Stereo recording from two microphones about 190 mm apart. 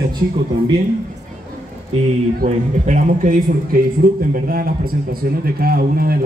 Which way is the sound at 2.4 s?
40° right (ahead or behind).